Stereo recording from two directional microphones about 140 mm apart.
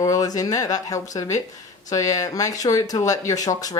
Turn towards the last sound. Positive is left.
turn(degrees=25)  # may be behind; listen again after turning